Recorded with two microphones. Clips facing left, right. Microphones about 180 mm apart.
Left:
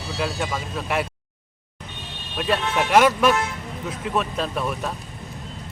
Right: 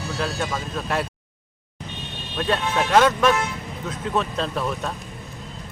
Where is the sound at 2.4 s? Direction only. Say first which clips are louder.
Even; 10° left (ahead or behind).